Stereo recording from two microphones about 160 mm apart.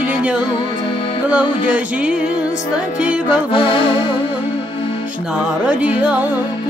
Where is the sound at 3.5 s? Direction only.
35° left (ahead or behind).